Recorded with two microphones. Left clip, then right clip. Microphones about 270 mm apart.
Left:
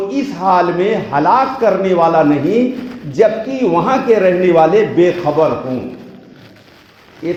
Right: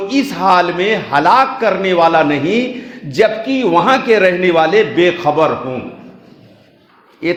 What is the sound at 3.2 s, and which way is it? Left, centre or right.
A man's voice, right.